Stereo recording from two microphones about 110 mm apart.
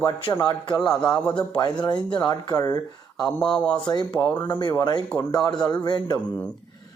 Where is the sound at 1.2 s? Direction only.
10° left (ahead or behind).